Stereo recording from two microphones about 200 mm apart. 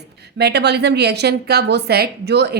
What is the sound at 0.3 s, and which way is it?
Speech, 55° right (ahead or behind).